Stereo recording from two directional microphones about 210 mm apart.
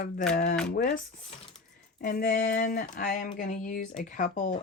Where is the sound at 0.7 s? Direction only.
35° left (ahead or behind).